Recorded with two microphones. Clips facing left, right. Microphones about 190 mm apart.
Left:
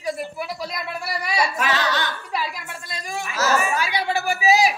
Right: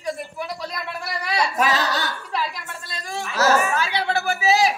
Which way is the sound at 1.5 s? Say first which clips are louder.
Right 2 dB; 40° right (ahead or behind).